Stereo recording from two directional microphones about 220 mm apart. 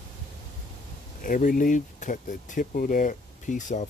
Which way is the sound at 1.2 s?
40° left (ahead or behind).